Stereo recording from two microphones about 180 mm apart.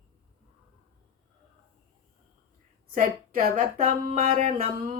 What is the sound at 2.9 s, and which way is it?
A woman's voice, 50° right (ahead or behind).